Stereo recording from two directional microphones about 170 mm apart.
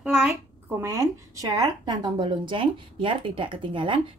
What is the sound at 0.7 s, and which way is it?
A woman's voice, 15° right (ahead or behind).